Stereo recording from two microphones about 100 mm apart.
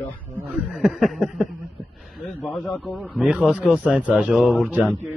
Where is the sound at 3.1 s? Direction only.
10° right (ahead or behind).